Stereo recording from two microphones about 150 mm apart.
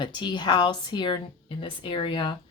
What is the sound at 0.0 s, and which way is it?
Speech, 30° left (ahead or behind).